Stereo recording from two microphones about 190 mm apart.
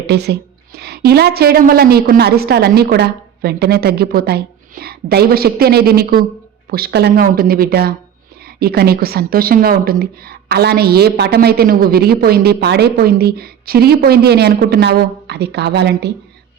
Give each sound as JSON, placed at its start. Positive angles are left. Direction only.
{"t": 0.1, "sound": "a woman's voice", "side_deg": -60}